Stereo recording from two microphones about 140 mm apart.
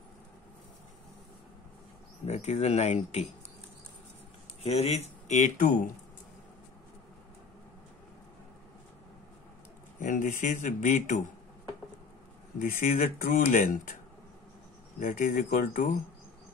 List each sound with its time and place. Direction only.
2.2 s speech: 55° left (ahead or behind)
4.6 s a man's voice: 50° left (ahead or behind); by 5.9 s 70° left (ahead or behind)
9.9 s a man's voice: 75° left (ahead or behind)
12.5 s speech: 85° left
15.0 s speech: 70° left (ahead or behind)